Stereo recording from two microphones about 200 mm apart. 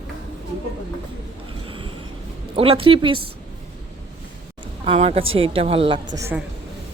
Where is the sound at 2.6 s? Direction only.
30° right (ahead or behind).